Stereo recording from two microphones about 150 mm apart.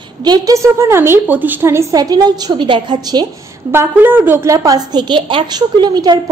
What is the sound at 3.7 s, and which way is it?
A woman's voice, 15° right (ahead or behind).